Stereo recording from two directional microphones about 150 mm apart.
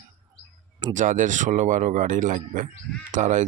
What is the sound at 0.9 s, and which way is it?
Speech, 60° right (ahead or behind).